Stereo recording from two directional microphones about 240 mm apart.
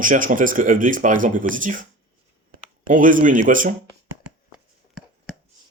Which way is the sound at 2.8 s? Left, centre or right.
Right.